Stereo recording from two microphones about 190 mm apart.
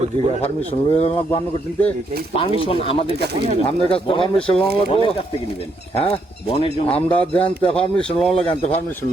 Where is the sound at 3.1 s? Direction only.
60° right (ahead or behind).